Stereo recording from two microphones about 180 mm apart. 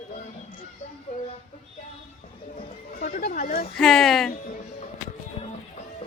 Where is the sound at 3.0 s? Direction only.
50° left (ahead or behind).